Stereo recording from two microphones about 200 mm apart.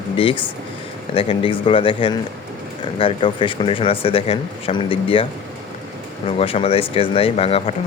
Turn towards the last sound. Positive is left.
turn(degrees=30)  # may be behind; listen again after turning